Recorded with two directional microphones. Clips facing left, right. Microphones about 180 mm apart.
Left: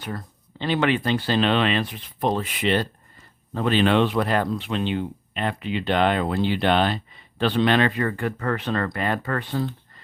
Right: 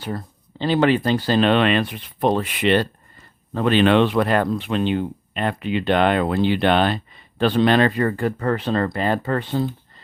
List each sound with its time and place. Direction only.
0.6 s speech: 35° right (ahead or behind)